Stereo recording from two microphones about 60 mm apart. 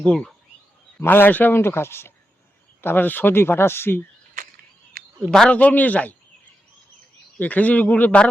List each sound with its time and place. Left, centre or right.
0.0 s a man's voice: centre
0.9 s speech: left
1.5 s speech: left
5.5 s a man's voice: left
7.3 s a man's voice: left